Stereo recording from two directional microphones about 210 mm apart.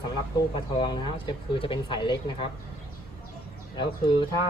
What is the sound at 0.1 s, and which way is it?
A man's voice, 20° left (ahead or behind).